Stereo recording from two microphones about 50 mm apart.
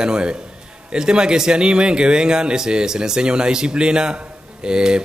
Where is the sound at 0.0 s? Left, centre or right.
Centre.